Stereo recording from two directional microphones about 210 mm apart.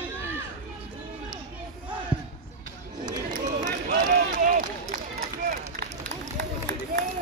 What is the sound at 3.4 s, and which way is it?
Run, 35° right (ahead or behind).